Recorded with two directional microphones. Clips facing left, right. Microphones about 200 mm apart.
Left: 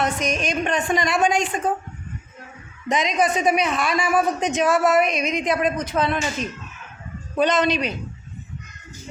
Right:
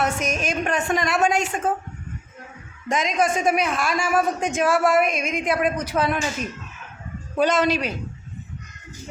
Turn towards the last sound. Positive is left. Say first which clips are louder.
# even
turn(degrees=-5)  # may be behind; listen again after turning